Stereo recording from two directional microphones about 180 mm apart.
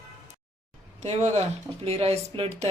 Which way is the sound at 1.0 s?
35° right (ahead or behind).